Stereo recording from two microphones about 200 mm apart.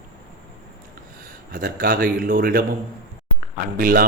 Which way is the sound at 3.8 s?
45° right (ahead or behind).